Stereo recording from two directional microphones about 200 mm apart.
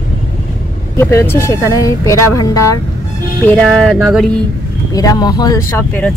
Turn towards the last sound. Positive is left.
turn(degrees=10)  # may be behind; listen again after turning